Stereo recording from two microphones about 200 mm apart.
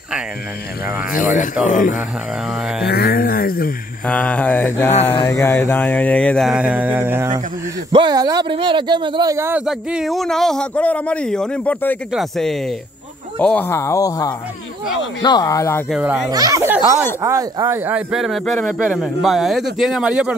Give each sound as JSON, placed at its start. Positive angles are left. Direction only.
{"t": 1.1, "sound": "speech", "side_deg": 40}
{"t": 2.5, "sound": "speech", "side_deg": -5}
{"t": 2.9, "sound": "speech", "side_deg": 50}
{"t": 4.0, "sound": "mantra", "side_deg": 5}
{"t": 7.9, "sound": "speech", "side_deg": -20}
{"t": 9.7, "sound": "speech", "side_deg": -5}
{"t": 13.4, "sound": "mantra", "side_deg": 10}
{"t": 15.9, "sound": "speech", "side_deg": -5}
{"t": 16.3, "sound": "speech", "side_deg": -20}